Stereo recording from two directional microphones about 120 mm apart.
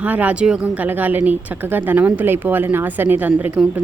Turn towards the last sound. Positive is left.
turn(degrees=-15)  # may be behind; listen again after turning